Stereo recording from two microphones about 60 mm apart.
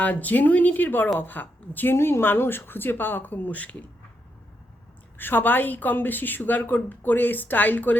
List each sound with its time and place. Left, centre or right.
0.0 s a woman's voice: left
5.1 s a woman's voice: left